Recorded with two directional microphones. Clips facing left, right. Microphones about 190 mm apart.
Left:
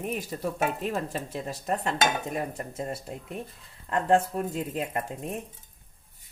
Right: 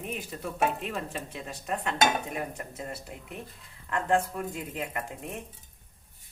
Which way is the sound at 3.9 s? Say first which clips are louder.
Left 3 dB; 35° left (ahead or behind).